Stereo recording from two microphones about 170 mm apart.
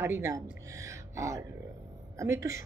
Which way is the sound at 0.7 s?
20° right (ahead or behind).